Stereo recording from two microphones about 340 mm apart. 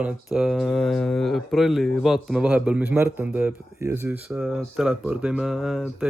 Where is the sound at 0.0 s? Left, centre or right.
Centre.